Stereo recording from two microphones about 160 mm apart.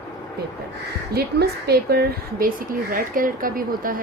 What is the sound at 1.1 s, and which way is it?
A woman's voice, 80° right.